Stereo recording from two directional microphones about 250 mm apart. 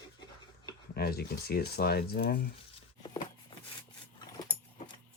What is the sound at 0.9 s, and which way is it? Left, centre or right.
Speech, left.